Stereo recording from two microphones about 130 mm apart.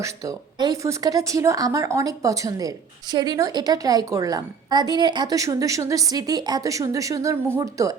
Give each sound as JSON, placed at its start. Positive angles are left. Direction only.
{"t": 0.0, "sound": "a woman's voice", "side_deg": -25}